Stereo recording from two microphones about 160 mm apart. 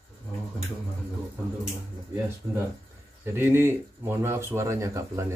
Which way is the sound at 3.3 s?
15° right (ahead or behind).